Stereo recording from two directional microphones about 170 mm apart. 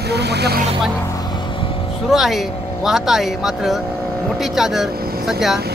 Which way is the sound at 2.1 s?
Centre (ahead or behind).